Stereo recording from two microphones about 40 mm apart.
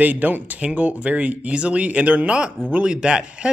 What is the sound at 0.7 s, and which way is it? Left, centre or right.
Speech, right.